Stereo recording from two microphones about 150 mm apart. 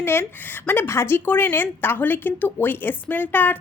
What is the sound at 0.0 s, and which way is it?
A woman's voice, 15° left (ahead or behind).